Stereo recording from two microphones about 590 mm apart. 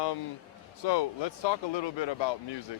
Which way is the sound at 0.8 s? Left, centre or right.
Left.